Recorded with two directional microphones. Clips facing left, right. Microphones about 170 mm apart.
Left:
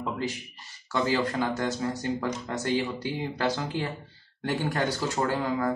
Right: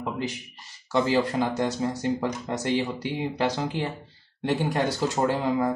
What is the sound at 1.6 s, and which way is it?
Speech, 20° right (ahead or behind).